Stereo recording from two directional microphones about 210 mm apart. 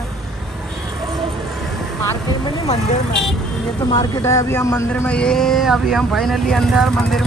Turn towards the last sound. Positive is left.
turn(degrees=0)  # may be behind; listen again after turning